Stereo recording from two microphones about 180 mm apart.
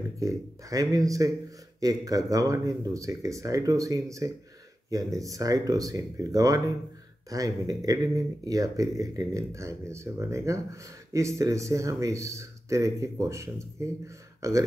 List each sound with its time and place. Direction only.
0.2 s speech: 20° right (ahead or behind)